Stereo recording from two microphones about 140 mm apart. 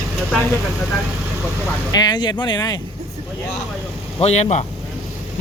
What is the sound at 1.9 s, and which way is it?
Speech, 30° left (ahead or behind).